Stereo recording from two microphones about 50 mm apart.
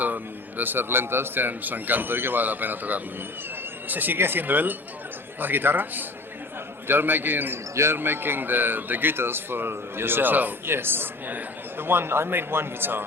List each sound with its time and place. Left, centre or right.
0.0 s a man's voice: right
10.7 s speech: right